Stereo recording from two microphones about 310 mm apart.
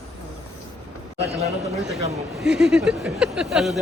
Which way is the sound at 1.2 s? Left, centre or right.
Centre.